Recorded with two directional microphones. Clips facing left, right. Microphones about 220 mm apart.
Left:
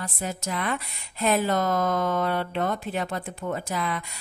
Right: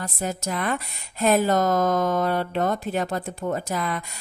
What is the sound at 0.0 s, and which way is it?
A woman's voice, 40° right (ahead or behind).